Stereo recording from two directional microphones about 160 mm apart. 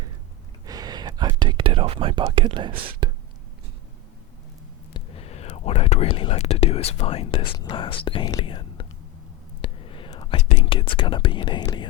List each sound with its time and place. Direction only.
0.6 s speech: 25° right (ahead or behind)
4.9 s speech: 40° left (ahead or behind)
9.6 s whispering: 35° left (ahead or behind)
10.6 s speech: 30° left (ahead or behind)